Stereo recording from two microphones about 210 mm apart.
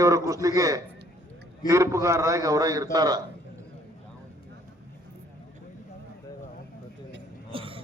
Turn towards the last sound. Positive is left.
turn(degrees=-25)  # may be behind; listen again after turning